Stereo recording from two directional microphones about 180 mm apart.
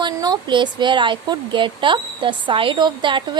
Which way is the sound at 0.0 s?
25° right (ahead or behind).